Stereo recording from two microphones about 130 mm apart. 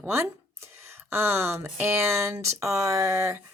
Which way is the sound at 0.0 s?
20° right (ahead or behind).